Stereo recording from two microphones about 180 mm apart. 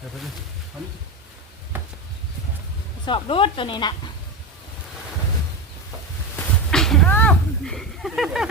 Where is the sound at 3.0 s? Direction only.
30° left (ahead or behind).